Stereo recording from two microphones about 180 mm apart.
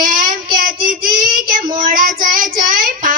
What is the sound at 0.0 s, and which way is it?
Child singing, 50° right (ahead or behind).